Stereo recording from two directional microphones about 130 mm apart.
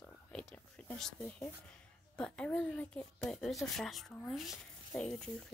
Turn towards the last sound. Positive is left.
turn(degrees=5)  # may be behind; listen again after turning